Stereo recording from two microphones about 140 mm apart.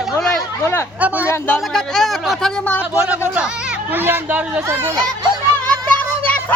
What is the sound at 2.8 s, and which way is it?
Speech, 10° right (ahead or behind).